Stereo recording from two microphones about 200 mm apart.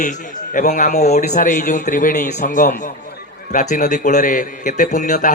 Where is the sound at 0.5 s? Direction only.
40° left (ahead or behind).